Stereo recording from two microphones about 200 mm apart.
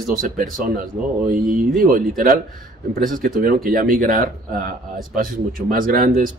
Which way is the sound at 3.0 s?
45° right (ahead or behind).